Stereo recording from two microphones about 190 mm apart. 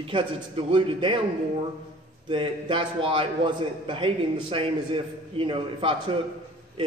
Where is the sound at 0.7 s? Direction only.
25° right (ahead or behind).